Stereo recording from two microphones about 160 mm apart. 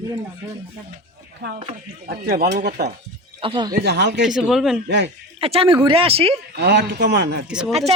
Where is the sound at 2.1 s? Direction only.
75° right (ahead or behind).